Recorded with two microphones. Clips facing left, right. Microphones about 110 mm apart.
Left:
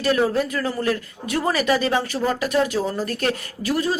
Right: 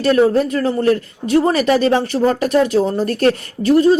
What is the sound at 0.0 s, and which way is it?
A woman's voice, 35° right (ahead or behind).